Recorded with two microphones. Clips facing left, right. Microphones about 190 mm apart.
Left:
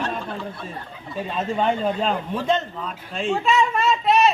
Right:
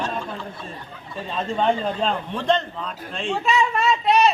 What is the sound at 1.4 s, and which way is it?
A man's voice, 5° left (ahead or behind).